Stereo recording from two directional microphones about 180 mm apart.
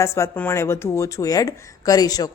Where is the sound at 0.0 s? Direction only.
15° left (ahead or behind).